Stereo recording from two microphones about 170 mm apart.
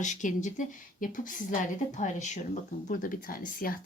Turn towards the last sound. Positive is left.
turn(degrees=55)  # may be behind; listen again after turning